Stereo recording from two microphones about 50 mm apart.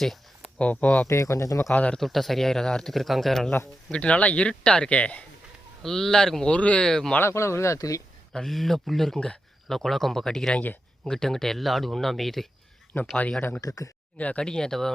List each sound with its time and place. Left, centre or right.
0.6 s speech: left
1.0 s speech: left
2.0 s speech: centre
3.9 s speech: left
5.8 s speech: centre
6.5 s speech: left
6.8 s speech: centre
7.2 s speech: left
8.3 s speech: centre
14.2 s speech: left
14.4 s speech: centre